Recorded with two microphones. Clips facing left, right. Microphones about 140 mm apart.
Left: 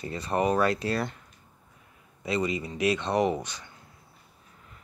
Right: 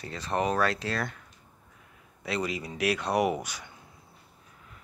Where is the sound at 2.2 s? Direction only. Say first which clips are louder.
Left 3 dB; centre (ahead or behind).